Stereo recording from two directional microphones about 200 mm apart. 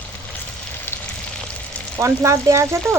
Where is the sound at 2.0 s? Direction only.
15° right (ahead or behind).